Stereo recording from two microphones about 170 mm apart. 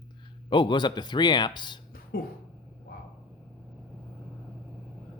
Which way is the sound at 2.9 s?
65° left (ahead or behind).